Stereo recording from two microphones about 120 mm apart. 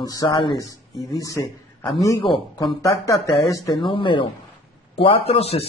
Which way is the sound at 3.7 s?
45° left (ahead or behind).